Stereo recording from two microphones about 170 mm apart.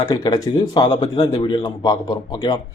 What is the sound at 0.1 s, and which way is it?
A man's voice, 20° left (ahead or behind).